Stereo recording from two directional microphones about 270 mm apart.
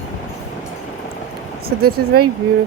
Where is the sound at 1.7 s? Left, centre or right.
Right.